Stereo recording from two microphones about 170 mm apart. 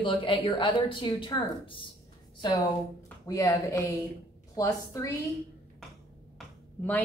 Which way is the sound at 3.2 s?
20° left (ahead or behind).